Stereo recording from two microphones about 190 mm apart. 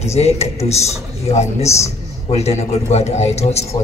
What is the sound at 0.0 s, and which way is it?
A man's voice, 35° left (ahead or behind).